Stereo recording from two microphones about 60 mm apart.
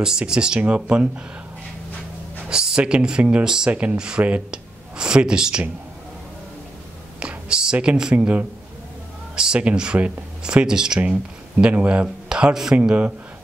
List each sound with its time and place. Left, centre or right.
0.0 s speech: centre
2.4 s speech: centre
7.2 s a sound: centre
9.3 s speech: centre